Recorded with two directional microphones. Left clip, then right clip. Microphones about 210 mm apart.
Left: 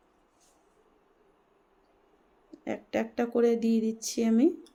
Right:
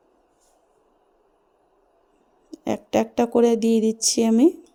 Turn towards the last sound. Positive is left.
turn(degrees=-40)  # may be behind; listen again after turning